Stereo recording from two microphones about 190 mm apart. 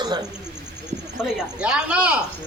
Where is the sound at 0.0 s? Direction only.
25° right (ahead or behind).